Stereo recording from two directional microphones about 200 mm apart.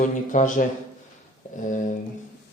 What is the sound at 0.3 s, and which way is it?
Speech, 40° left (ahead or behind).